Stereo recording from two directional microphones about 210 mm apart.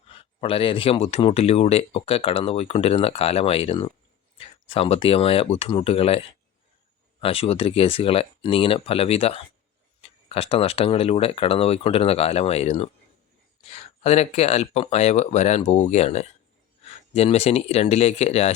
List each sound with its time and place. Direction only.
0.1 s speech: 25° left (ahead or behind)